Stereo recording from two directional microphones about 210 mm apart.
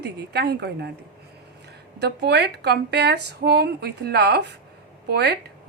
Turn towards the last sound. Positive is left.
turn(degrees=-50)  # may be behind; listen again after turning